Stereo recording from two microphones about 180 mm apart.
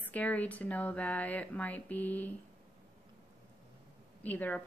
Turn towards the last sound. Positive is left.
turn(degrees=10)  # may be behind; listen again after turning